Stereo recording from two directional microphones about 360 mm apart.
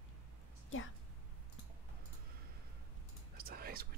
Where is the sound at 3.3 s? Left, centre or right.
Right.